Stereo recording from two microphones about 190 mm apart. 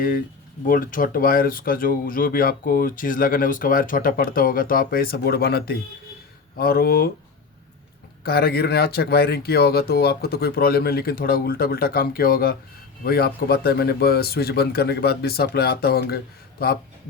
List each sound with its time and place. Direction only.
0.6 s speech: 45° left (ahead or behind)
8.2 s speech: 55° left (ahead or behind)